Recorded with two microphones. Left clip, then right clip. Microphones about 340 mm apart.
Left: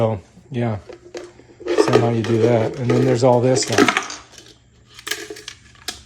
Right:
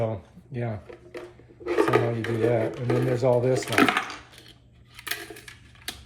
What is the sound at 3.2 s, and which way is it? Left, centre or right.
Speech, left.